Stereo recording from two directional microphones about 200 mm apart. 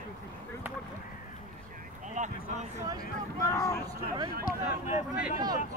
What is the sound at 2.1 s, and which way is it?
Speech, 35° right (ahead or behind).